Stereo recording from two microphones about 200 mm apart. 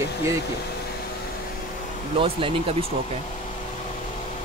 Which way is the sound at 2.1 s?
25° right (ahead or behind).